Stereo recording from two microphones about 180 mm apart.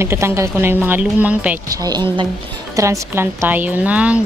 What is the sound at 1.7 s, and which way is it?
A woman's voice, 20° right (ahead or behind).